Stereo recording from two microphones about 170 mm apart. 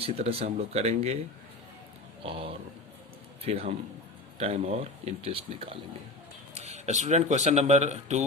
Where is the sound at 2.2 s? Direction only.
30° right (ahead or behind).